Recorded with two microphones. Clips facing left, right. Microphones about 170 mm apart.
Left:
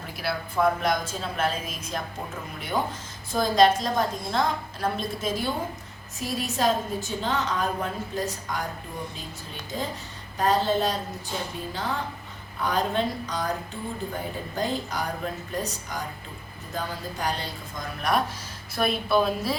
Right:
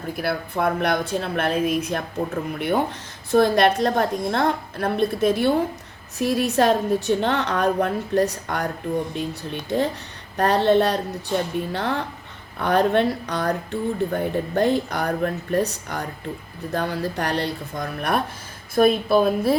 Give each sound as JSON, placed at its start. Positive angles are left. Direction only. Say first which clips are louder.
{"t": 0.2, "sound": "speech", "louder": "right 1 dB", "side_deg": -60}
{"t": 18.7, "sound": "speech", "louder": "right 7 dB", "side_deg": -50}